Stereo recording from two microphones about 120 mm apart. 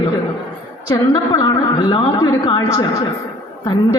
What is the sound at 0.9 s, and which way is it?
A man's voice, 30° left (ahead or behind).